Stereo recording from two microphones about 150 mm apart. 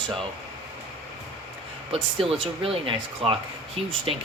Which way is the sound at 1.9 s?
40° right (ahead or behind).